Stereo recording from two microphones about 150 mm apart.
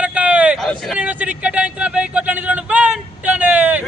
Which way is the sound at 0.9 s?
10° right (ahead or behind).